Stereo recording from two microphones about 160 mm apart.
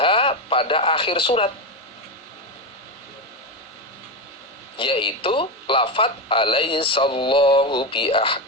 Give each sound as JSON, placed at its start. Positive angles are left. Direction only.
{"t": 0.0, "sound": "radio", "side_deg": 35}
{"t": 4.8, "sound": "speech", "side_deg": 30}